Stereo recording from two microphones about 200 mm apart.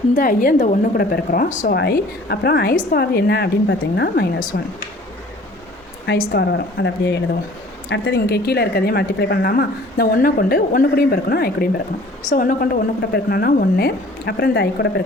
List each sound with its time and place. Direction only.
0.2 s a woman's voice: 45° left (ahead or behind)
6.1 s a woman's voice: 55° left (ahead or behind)